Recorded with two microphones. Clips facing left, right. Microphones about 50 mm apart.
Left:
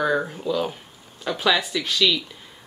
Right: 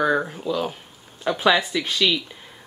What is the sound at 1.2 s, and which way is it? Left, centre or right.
Speech, centre.